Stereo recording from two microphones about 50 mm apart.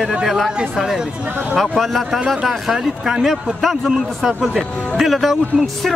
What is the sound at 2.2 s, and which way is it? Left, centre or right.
Speech, centre.